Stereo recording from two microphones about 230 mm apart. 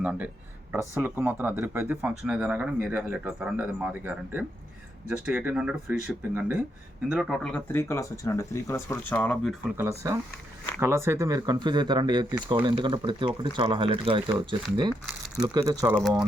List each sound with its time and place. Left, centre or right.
0.0 s speech: centre
10.8 s speech: centre
15.5 s speech: centre
16.0 s speech: centre